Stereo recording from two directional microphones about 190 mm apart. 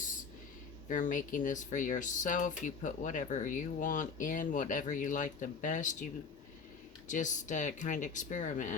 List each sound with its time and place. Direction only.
0.9 s speech: 40° left (ahead or behind)
7.1 s speech: 40° left (ahead or behind)